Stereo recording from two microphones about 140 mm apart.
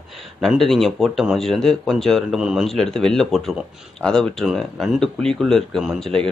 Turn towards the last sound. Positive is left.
turn(degrees=5)  # may be behind; listen again after turning